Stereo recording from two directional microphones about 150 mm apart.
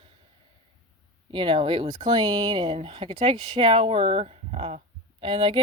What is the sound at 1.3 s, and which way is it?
Speech, 35° right (ahead or behind).